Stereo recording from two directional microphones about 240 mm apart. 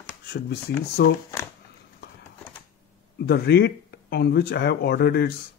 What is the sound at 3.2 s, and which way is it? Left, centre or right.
Speech, left.